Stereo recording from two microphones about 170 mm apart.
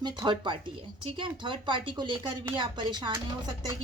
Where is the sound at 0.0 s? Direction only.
25° right (ahead or behind).